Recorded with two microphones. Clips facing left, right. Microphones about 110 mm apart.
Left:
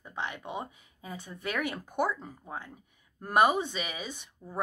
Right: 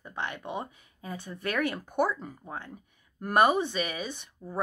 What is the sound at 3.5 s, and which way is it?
Speech, 60° right (ahead or behind).